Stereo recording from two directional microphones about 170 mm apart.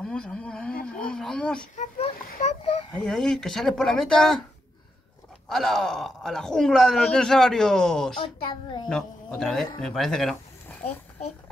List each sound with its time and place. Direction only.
0.0 s speech: 5° left (ahead or behind)
2.4 s a sound: 35° left (ahead or behind)
3.1 s speech: 5° left (ahead or behind)
5.5 s speech: centre (ahead or behind)
8.2 s a child's voice: 30° left (ahead or behind)
8.8 s speech: 5° left (ahead or behind)